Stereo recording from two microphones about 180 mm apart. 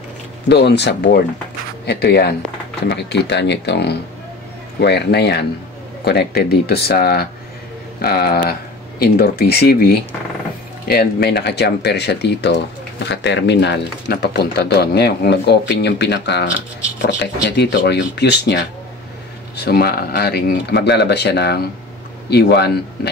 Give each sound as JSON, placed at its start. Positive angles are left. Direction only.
{"t": 0.5, "sound": "speech", "side_deg": 70}